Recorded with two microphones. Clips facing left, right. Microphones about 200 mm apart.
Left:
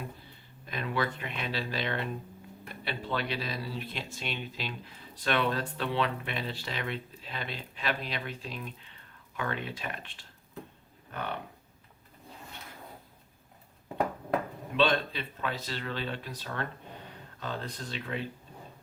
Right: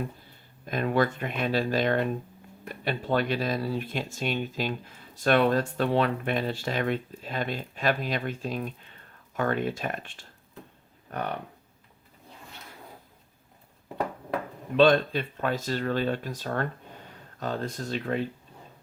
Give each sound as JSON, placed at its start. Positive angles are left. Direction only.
{"t": 0.6, "sound": "speech", "side_deg": -45}
{"t": 14.8, "sound": "speech", "side_deg": -45}